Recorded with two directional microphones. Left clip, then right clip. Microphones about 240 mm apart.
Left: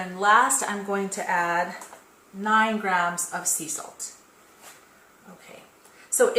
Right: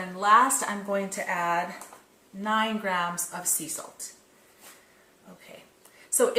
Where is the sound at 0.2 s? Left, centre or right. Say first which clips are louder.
Left 1 dB; centre.